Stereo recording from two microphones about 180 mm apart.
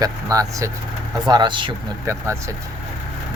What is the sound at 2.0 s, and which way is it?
Speech, 15° right (ahead or behind).